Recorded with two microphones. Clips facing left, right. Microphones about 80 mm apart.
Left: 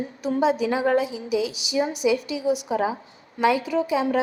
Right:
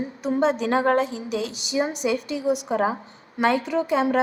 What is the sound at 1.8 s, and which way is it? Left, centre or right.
A woman's voice, right.